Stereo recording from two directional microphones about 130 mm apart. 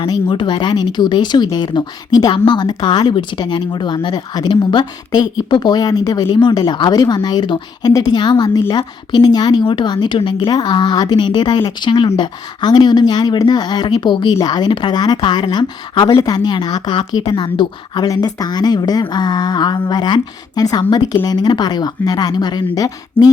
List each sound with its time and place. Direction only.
0.0 s a woman's voice: 35° left (ahead or behind)